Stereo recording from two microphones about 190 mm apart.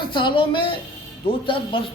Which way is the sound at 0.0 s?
25° left (ahead or behind).